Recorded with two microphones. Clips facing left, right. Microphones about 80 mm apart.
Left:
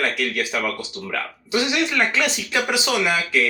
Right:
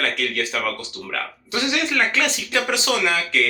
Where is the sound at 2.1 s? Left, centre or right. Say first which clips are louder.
Even; centre.